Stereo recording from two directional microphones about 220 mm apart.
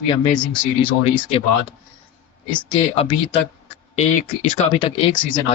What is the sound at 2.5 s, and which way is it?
Speech, 20° left (ahead or behind).